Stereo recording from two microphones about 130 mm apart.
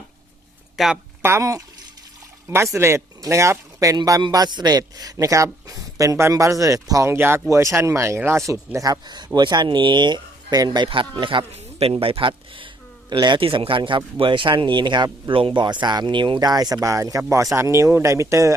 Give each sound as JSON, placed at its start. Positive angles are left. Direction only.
{"t": 0.8, "sound": "speech", "side_deg": 0}
{"t": 1.2, "sound": "speech", "side_deg": -20}